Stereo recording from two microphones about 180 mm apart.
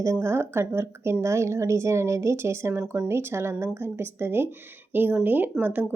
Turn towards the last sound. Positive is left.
turn(degrees=-10)  # may be behind; listen again after turning